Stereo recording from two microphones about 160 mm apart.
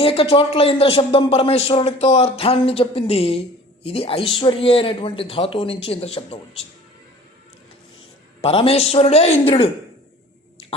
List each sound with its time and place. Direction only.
0.0 s speech: 35° left (ahead or behind)
8.4 s speech: 35° left (ahead or behind)